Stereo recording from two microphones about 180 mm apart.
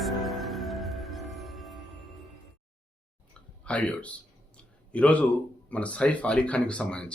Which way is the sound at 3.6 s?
5° left (ahead or behind).